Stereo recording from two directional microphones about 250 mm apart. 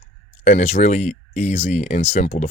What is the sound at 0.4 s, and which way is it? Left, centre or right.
Speech, left.